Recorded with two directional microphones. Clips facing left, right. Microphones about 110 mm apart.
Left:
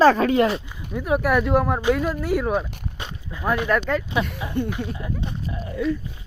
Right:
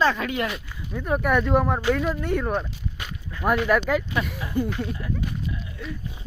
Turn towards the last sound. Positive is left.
turn(degrees=40)  # may be behind; listen again after turning